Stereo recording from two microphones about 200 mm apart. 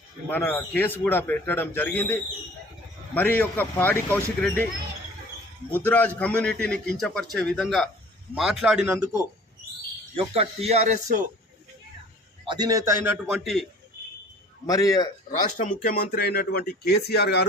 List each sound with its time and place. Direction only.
0.3 s a man's voice: 10° left (ahead or behind)
3.2 s a man's voice: 10° left (ahead or behind)
5.7 s a man's voice: 10° left (ahead or behind); by 9.0 s 10° right (ahead or behind)
10.2 s speech: 30° right (ahead or behind)
12.5 s a man's voice: 20° right (ahead or behind); by 13.7 s centre (ahead or behind)
14.7 s a man's voice: 15° left (ahead or behind)
15.3 s speech: 35° left (ahead or behind); by 17.4 s 55° left (ahead or behind)